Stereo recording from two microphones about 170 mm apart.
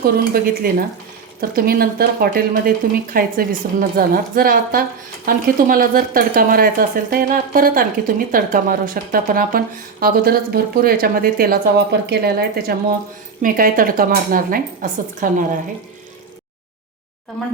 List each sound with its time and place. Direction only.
0.0 s speech: 60° right (ahead or behind)
13.4 s speech: 55° right (ahead or behind)